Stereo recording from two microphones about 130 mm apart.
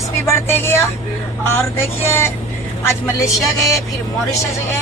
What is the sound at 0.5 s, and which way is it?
Speech, 20° left (ahead or behind).